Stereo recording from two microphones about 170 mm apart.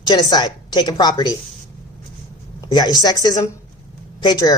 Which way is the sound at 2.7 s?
25° left (ahead or behind).